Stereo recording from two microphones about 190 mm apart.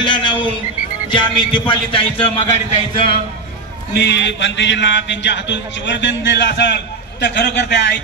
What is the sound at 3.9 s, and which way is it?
A man's voice, 70° left (ahead or behind).